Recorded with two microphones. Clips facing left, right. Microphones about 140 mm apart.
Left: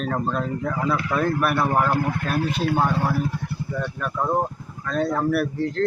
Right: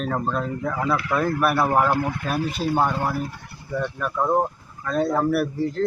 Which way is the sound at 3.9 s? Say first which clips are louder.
Right 2 dB; 5° right (ahead or behind).